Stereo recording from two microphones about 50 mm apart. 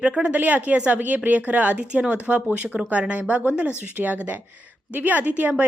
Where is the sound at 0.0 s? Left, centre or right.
Right.